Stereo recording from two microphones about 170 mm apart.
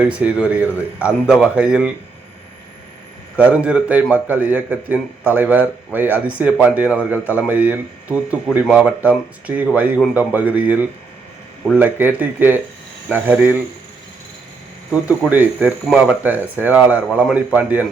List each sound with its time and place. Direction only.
0.0 s a man's voice: 10° right (ahead or behind)
3.3 s a man's voice: 10° right (ahead or behind)
15.3 s a man's voice: 10° right (ahead or behind)